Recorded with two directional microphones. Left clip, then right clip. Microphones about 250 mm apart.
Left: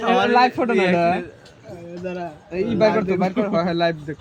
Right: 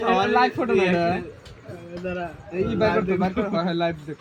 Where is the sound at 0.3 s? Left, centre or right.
Left.